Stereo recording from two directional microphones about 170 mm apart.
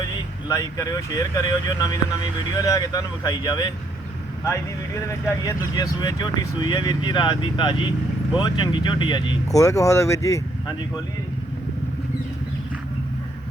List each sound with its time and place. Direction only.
0.0 s speech: 20° left (ahead or behind)
5.2 s speech: 20° left (ahead or behind)